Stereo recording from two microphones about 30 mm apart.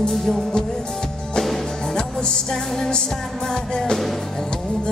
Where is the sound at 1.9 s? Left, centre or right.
Left.